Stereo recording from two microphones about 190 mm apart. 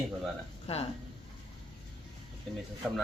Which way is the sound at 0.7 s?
35° left (ahead or behind).